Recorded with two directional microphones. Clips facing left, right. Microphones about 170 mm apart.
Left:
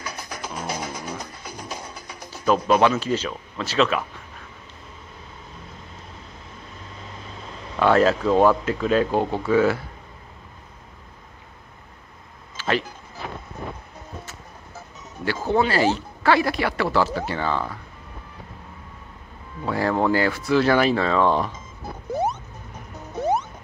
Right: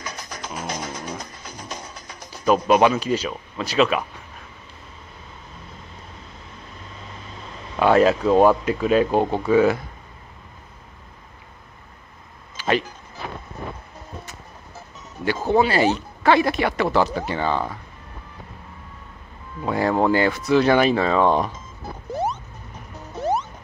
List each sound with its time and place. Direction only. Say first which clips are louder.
0.3 s music: even; 10° left (ahead or behind)
2.4 s speech: right 2 dB; 15° right (ahead or behind)
7.8 s speech: right 2 dB; 15° right (ahead or behind)
12.5 s music: right 2 dB; 20° right (ahead or behind)
15.2 s speech: right 2 dB; 15° right (ahead or behind)
19.6 s speech: right 2 dB; 20° right (ahead or behind)